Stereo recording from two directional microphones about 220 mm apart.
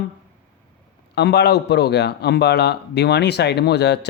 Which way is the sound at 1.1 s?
50° left (ahead or behind).